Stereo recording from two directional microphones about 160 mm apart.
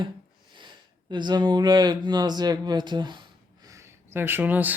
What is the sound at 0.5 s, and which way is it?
Speech, 30° right (ahead or behind).